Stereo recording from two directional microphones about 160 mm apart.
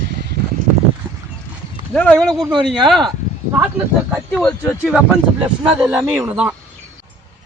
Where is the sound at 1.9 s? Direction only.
5° left (ahead or behind).